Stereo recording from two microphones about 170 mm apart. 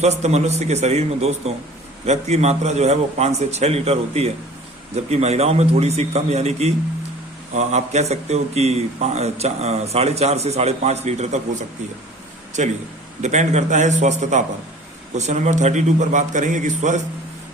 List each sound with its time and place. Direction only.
0.0 s speech: 40° right (ahead or behind)
12.6 s a man's voice: 45° right (ahead or behind)